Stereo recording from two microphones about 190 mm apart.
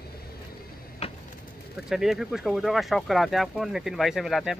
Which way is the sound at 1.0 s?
35° left (ahead or behind).